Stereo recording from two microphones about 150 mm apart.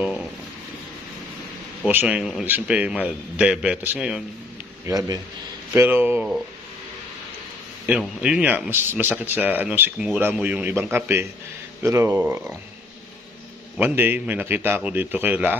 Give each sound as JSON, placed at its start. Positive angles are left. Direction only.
{"t": 1.9, "sound": "speech", "side_deg": -10}
{"t": 4.8, "sound": "speech", "side_deg": -25}
{"t": 5.7, "sound": "speech", "side_deg": -15}
{"t": 8.0, "sound": "speech", "side_deg": -5}
{"t": 13.7, "sound": "speech", "side_deg": -15}